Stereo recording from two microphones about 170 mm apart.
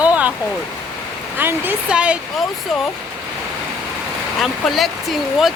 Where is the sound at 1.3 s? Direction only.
10° right (ahead or behind).